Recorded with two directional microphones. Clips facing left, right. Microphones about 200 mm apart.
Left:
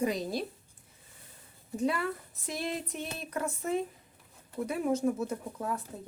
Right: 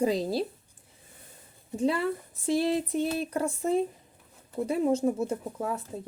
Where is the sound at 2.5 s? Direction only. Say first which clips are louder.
Right 10 dB; 30° right (ahead or behind).